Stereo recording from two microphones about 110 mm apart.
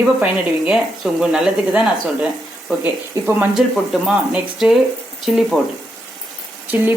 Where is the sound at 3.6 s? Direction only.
5° right (ahead or behind).